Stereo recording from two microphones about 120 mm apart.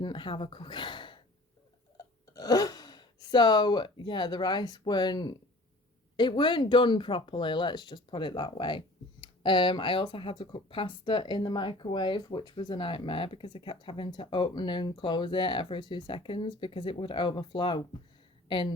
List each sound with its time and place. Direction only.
0.0 s speech: 40° left (ahead or behind)
2.3 s a woman's voice: 30° left (ahead or behind)